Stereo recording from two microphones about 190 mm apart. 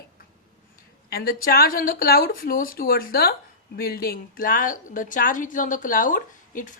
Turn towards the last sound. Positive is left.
turn(degrees=45)  # may be behind; listen again after turning